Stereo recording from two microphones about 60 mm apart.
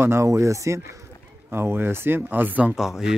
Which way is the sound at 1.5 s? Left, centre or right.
Right.